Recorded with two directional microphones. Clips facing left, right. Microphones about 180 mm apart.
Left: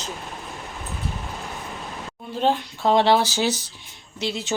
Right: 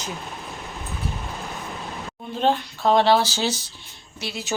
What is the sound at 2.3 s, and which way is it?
Speech, 10° left (ahead or behind).